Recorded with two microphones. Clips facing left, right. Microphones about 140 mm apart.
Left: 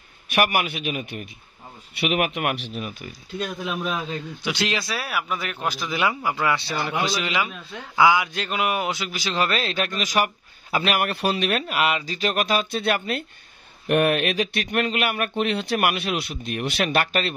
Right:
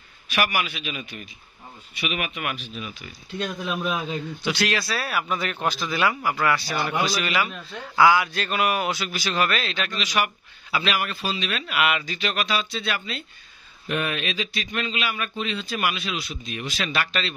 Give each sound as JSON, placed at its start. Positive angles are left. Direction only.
{"t": 0.3, "sound": "speech", "side_deg": 55}
{"t": 2.8, "sound": "speech", "side_deg": 50}
{"t": 3.3, "sound": "a man's voice", "side_deg": 5}
{"t": 4.4, "sound": "a man's voice", "side_deg": 20}
{"t": 11.6, "sound": "speech", "side_deg": 35}